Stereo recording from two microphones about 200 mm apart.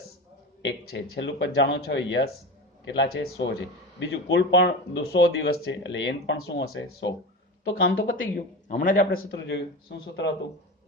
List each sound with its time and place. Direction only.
0.6 s speech: 80° left
1.1 s speech: 60° left (ahead or behind)
8.1 s speech: 40° left (ahead or behind)
9.1 s speech: 60° left (ahead or behind)